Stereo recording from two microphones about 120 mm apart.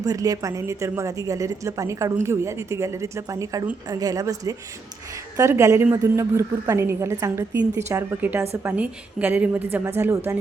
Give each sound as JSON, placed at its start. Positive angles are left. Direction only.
{"t": 0.0, "sound": "speech", "side_deg": -30}